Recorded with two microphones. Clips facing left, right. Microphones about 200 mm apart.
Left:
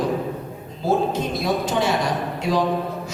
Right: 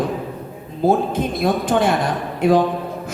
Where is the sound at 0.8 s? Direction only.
55° right (ahead or behind).